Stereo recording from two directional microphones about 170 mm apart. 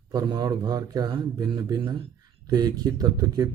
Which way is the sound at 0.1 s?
25° right (ahead or behind).